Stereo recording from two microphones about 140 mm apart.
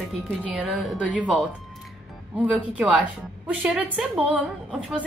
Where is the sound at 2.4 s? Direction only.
10° right (ahead or behind).